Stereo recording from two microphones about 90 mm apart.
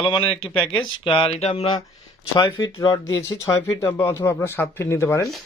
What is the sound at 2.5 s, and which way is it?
Speech, 45° left (ahead or behind).